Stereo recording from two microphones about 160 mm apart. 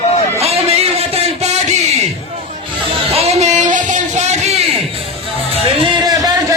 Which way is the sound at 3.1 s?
40° right (ahead or behind).